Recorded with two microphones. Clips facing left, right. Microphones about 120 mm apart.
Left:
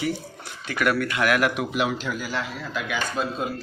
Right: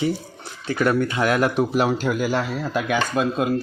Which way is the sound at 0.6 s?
30° right (ahead or behind).